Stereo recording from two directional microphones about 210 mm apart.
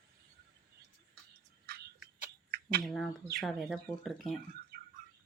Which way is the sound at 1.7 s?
50° right (ahead or behind).